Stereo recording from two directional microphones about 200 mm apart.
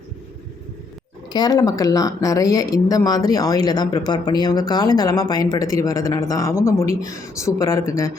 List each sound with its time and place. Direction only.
1.3 s speech: 20° left (ahead or behind)